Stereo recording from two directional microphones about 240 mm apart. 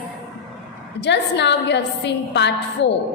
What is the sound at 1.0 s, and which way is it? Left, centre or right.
A woman's voice, left.